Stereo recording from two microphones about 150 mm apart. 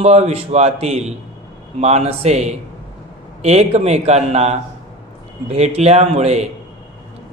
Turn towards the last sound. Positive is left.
turn(degrees=-45)  # may be behind; listen again after turning